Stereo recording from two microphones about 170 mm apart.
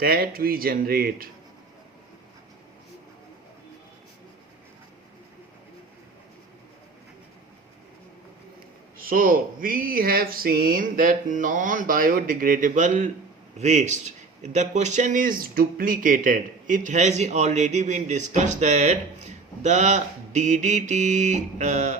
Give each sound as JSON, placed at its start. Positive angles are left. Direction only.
{"t": 0.0, "sound": "speech", "side_deg": -60}
{"t": 9.0, "sound": "a man's voice", "side_deg": -55}